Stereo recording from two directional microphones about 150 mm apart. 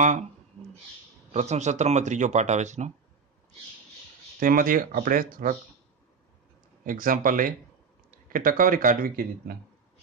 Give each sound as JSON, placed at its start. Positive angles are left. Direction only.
{"t": 1.3, "sound": "speech", "side_deg": -50}
{"t": 4.4, "sound": "speech", "side_deg": -65}
{"t": 6.8, "sound": "a man's voice", "side_deg": -65}